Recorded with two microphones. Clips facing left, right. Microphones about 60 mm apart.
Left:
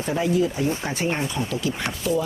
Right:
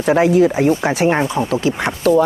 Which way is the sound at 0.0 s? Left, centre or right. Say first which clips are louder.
Right 10 dB; right.